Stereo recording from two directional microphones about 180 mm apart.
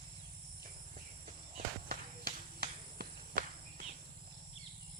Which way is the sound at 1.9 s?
60° right (ahead or behind).